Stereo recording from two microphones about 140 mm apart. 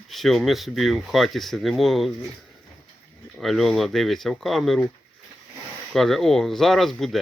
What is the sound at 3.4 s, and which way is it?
Speech, centre (ahead or behind).